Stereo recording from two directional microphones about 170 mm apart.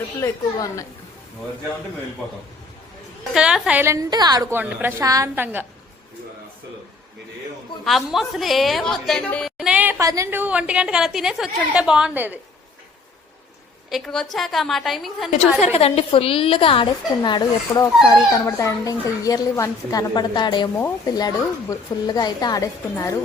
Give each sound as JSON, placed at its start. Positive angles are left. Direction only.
{"t": 0.2, "sound": "a woman's voice", "side_deg": 20}
{"t": 3.3, "sound": "a woman's voice", "side_deg": -5}
{"t": 7.9, "sound": "a woman's voice", "side_deg": 0}
{"t": 13.9, "sound": "a woman's voice", "side_deg": 5}
{"t": 15.6, "sound": "a woman's voice", "side_deg": 35}